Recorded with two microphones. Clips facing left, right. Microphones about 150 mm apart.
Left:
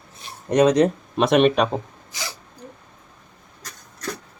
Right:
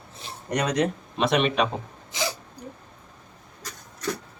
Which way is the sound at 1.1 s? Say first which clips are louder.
Left 6 dB; 45° left (ahead or behind).